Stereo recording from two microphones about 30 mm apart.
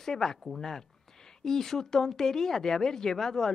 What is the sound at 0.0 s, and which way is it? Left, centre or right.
Speech, centre.